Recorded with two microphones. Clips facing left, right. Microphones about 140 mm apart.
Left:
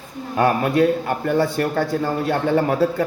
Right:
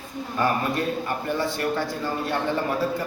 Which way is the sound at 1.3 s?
55° left (ahead or behind).